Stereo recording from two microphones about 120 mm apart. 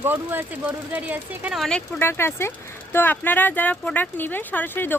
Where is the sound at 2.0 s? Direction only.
20° left (ahead or behind).